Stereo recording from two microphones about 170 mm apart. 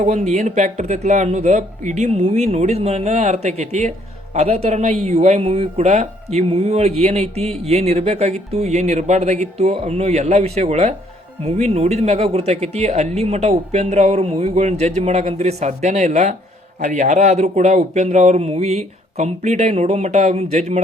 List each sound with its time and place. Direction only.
0.0 s speech: 40° right (ahead or behind)